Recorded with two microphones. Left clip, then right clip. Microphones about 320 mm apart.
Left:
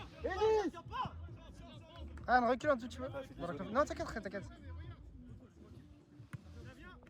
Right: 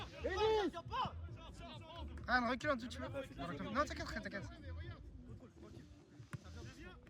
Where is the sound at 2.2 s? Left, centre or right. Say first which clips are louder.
Left 6 dB; centre.